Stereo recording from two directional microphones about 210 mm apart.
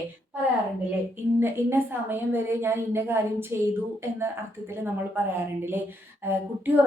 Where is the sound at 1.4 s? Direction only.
10° right (ahead or behind).